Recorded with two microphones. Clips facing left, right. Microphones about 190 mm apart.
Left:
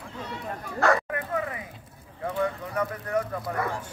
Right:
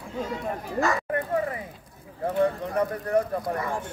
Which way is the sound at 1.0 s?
35° right (ahead or behind).